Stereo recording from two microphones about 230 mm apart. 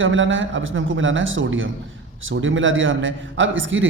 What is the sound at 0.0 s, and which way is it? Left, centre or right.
A man's voice, right.